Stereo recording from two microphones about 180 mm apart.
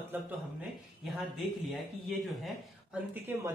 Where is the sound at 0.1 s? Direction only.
5° right (ahead or behind).